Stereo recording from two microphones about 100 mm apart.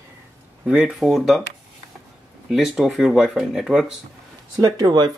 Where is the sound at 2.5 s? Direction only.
5° right (ahead or behind).